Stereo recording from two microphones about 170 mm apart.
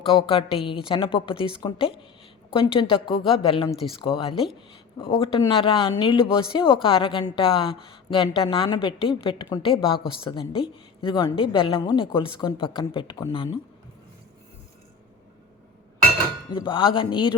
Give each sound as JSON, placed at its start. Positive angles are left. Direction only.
{"t": 0.0, "sound": "a woman's voice", "side_deg": 30}
{"t": 16.5, "sound": "a woman's voice", "side_deg": 30}